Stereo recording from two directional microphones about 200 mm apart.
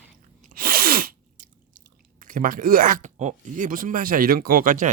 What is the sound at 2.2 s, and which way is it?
Speech, 45° right (ahead or behind).